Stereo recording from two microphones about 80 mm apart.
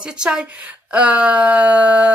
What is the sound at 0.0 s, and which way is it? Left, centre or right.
Speech, centre.